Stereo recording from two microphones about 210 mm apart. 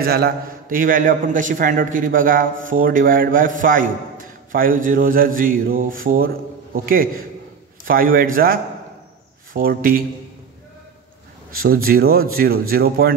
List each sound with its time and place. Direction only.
0.0 s a man's voice: 45° right (ahead or behind)
11.5 s a man's voice: 45° right (ahead or behind)